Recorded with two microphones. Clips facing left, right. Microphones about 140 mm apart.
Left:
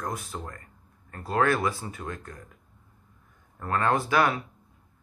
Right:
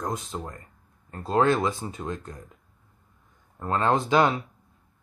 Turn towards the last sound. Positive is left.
turn(degrees=-20)  # may be behind; listen again after turning